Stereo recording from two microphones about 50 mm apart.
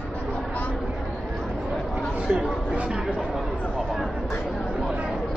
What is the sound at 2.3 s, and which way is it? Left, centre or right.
Chatter, right.